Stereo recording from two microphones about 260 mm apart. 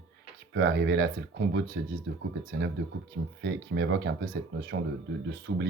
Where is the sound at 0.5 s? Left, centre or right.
Right.